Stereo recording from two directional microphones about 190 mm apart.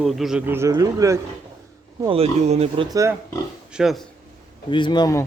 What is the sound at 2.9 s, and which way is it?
Speech, 15° right (ahead or behind).